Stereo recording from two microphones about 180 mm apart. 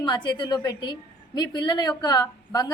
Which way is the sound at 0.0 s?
25° left (ahead or behind).